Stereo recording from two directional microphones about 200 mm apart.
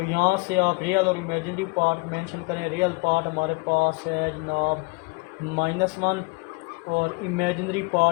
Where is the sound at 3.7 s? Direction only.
45° right (ahead or behind).